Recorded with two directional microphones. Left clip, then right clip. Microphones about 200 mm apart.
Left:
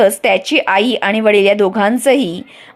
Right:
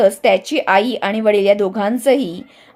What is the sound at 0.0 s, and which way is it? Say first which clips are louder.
A woman's voice: left 1 dB; 10° left (ahead or behind).